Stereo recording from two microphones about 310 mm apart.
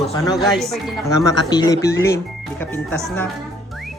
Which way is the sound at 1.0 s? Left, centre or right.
Centre.